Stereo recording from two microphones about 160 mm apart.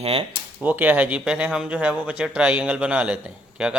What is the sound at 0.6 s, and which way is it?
A man's voice, 10° right (ahead or behind).